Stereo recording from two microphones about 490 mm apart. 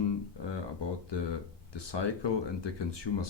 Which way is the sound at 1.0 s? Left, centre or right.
Left.